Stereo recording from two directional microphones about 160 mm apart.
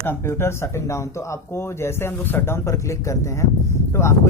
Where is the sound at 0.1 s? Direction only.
15° left (ahead or behind).